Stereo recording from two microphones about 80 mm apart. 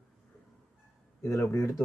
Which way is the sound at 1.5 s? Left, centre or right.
Left.